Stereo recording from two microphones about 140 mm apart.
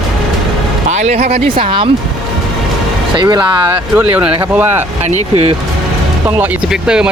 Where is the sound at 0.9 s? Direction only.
50° right (ahead or behind).